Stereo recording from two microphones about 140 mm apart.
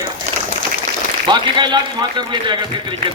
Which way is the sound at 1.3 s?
35° right (ahead or behind).